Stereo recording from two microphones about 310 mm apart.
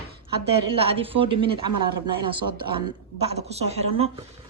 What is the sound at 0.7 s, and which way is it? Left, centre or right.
Speech, centre.